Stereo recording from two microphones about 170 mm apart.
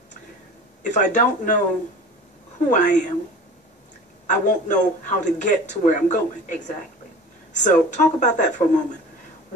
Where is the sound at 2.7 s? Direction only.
45° left (ahead or behind).